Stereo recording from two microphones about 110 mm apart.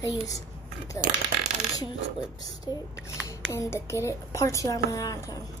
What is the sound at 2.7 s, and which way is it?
Speech, 35° left (ahead or behind).